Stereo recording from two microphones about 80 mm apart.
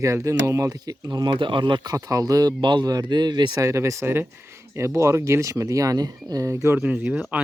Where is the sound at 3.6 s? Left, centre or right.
Right.